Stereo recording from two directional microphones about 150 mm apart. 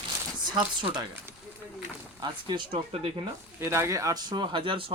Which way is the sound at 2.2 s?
30° right (ahead or behind).